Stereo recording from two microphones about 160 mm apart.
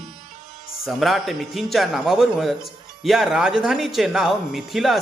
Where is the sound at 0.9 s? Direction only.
Centre (ahead or behind).